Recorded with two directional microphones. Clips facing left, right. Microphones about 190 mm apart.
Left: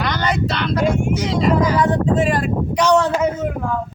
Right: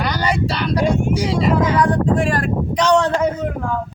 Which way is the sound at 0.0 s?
10° right (ahead or behind).